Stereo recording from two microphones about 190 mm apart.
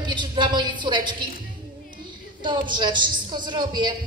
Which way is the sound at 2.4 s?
25° right (ahead or behind).